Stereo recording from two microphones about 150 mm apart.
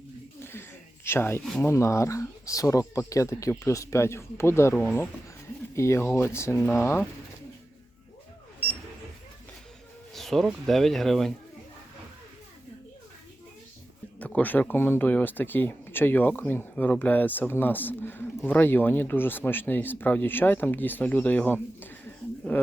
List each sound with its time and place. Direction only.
1.0 s speech: 15° left (ahead or behind)
10.2 s speech: centre (ahead or behind)
14.2 s speech: 10° left (ahead or behind)